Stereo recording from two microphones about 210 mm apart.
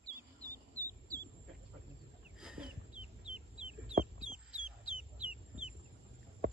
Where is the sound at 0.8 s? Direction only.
15° right (ahead or behind).